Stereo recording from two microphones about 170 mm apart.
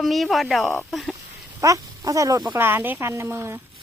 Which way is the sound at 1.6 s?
20° right (ahead or behind).